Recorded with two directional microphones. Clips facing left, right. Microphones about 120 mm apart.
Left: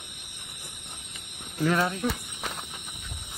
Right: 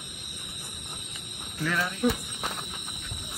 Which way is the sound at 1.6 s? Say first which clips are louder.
Left 5 dB; 35° left (ahead or behind).